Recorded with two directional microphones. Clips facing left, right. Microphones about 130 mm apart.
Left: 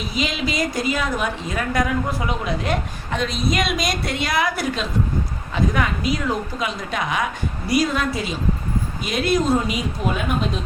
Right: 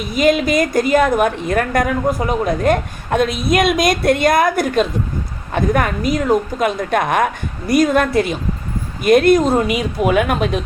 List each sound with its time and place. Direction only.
0.0 s a woman's voice: 50° right (ahead or behind); by 10.6 s 70° right (ahead or behind)